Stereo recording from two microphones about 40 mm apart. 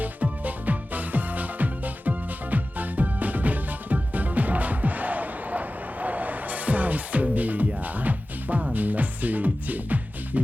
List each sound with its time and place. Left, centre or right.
0.0 s music: right